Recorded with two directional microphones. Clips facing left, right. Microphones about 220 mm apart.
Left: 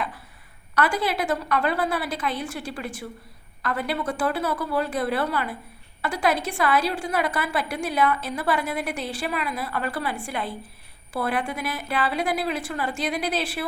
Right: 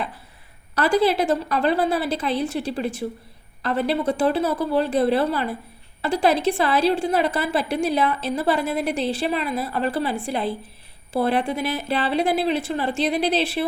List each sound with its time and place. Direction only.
0.8 s a woman's voice: 30° right (ahead or behind)